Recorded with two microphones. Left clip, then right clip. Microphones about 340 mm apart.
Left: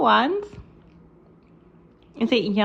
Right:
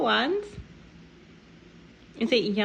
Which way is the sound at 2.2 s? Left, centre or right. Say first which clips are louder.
Left 2 dB; centre.